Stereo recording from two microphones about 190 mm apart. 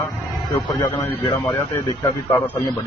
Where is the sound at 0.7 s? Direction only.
20° left (ahead or behind).